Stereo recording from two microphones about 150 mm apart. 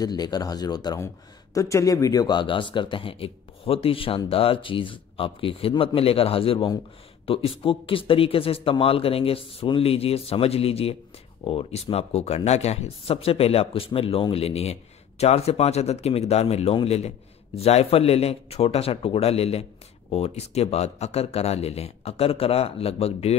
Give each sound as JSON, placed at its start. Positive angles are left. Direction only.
{"t": 0.0, "sound": "a man's voice", "side_deg": 25}